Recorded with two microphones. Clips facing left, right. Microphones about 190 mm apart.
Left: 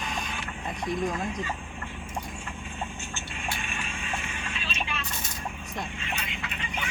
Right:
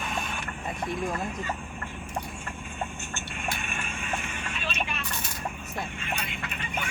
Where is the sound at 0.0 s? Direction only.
55° right (ahead or behind).